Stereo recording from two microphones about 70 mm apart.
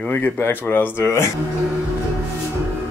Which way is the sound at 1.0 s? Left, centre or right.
Left.